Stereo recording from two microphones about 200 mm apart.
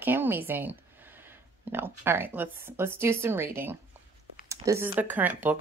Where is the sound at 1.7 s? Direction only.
10° right (ahead or behind).